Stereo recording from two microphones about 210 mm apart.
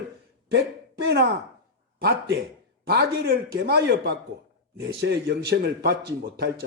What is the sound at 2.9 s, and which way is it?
A man's voice, 50° right (ahead or behind).